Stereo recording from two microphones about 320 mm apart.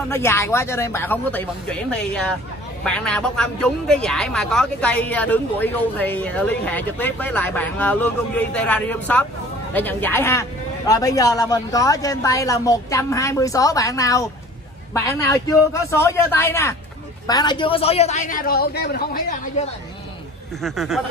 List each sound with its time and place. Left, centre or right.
0.1 s a woman's voice: centre; by 19.7 s left
20.6 s a man's voice: centre